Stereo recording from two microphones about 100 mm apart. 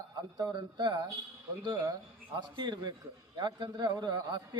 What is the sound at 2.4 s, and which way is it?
A man's voice, 50° right (ahead or behind).